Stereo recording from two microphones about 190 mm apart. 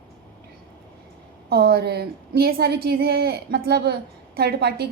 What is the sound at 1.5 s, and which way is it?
A woman's voice, 55° right (ahead or behind).